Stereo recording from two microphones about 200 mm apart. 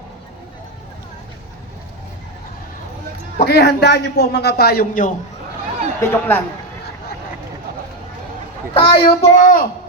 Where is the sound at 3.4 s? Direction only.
55° left (ahead or behind).